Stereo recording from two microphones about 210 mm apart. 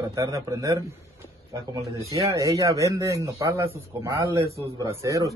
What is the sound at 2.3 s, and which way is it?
A man's voice, 15° right (ahead or behind).